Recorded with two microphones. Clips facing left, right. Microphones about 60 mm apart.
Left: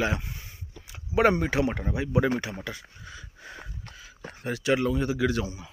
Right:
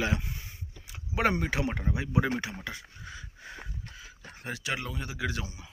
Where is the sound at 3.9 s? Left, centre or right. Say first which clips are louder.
Left 1 dB; left.